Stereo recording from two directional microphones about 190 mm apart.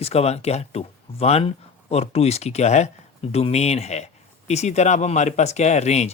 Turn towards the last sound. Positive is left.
turn(degrees=35)  # may be behind; listen again after turning